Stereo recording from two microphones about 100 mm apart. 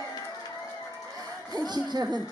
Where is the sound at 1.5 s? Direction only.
45° right (ahead or behind).